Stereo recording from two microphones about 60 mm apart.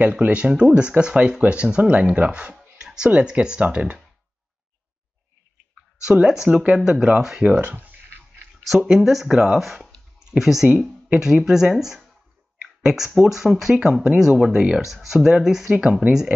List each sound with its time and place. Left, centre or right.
0.0 s speech: right
6.1 s speech: centre
7.4 s speech: right
8.8 s speech: centre
11.7 s speech: centre
15.8 s speech: centre